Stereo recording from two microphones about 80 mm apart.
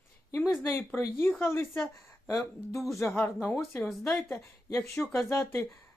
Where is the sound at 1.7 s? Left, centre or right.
Centre.